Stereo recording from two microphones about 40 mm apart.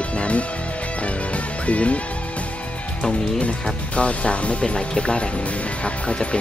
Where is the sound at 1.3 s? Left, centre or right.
Left.